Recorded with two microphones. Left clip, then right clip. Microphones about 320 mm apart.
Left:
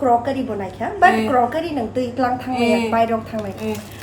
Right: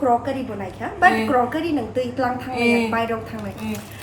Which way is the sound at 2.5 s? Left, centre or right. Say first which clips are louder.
Right 1 dB; centre.